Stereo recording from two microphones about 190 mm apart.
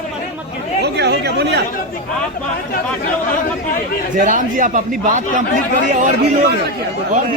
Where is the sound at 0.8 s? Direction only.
60° right (ahead or behind).